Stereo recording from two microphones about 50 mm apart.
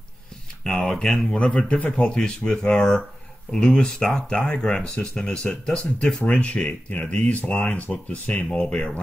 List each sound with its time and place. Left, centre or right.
0.7 s speech: centre
1.3 s speech: left